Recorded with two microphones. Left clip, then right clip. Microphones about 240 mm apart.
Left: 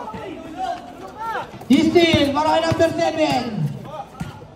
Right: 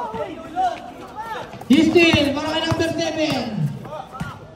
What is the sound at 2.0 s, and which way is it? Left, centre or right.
A man's voice, centre.